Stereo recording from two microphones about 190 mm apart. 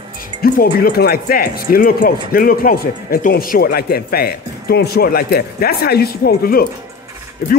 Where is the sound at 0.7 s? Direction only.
55° left (ahead or behind).